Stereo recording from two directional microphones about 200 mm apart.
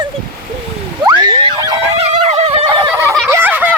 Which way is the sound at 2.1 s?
30° right (ahead or behind).